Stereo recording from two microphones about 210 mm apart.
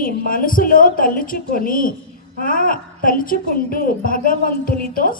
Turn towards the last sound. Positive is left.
turn(degrees=40)  # may be behind; listen again after turning